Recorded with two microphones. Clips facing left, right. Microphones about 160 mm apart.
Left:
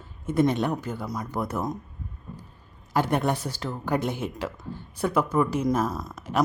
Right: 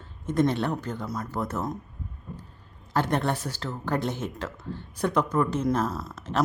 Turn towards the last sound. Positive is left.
turn(degrees=10)  # may be behind; listen again after turning